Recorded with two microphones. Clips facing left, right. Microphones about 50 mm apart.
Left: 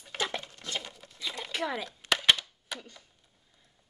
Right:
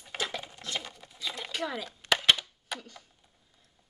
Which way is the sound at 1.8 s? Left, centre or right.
Centre.